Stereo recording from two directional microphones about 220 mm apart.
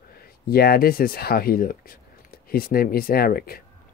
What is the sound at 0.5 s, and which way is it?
Speech, 45° left (ahead or behind).